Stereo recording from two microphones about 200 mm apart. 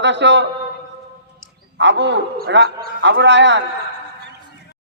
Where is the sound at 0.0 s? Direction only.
60° right (ahead or behind).